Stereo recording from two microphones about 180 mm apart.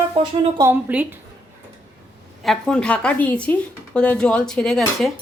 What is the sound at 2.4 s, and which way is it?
Speech, 5° left (ahead or behind).